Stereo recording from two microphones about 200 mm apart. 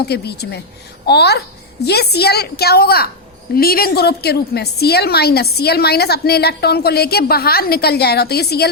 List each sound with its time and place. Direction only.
0.0 s a woman's voice: 55° left (ahead or behind)